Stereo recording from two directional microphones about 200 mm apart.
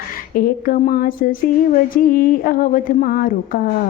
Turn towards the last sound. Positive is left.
turn(degrees=45)  # may be behind; listen again after turning